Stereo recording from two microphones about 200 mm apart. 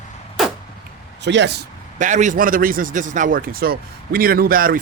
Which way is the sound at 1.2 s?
60° right (ahead or behind).